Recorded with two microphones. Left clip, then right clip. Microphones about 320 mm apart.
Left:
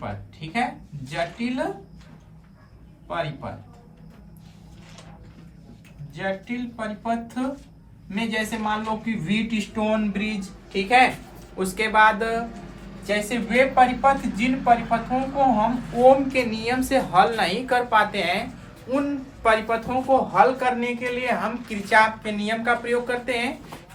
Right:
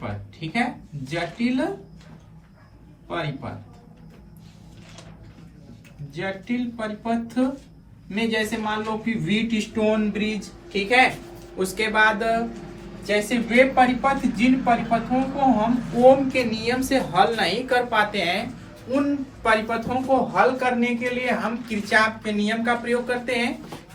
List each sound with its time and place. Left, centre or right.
0.0 s a sound: centre
1.1 s a man's voice: centre
6.1 s a man's voice: centre